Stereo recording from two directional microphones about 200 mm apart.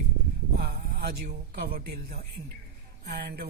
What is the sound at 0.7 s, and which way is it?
A man's voice, 50° right (ahead or behind).